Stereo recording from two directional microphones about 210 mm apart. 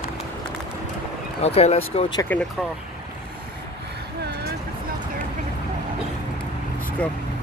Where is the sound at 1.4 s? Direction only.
30° left (ahead or behind).